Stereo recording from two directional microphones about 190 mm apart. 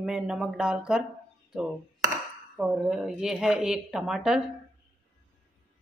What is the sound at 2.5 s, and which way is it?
Speech, 5° right (ahead or behind).